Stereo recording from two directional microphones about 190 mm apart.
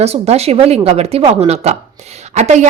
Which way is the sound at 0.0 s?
35° right (ahead or behind).